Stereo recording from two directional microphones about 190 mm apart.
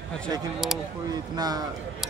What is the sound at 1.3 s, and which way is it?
Speech, 20° right (ahead or behind).